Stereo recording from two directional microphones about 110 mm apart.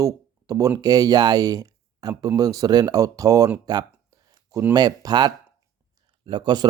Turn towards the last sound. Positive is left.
turn(degrees=-45)  # may be behind; listen again after turning